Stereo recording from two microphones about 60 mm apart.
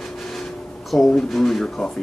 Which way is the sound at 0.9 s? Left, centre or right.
Centre.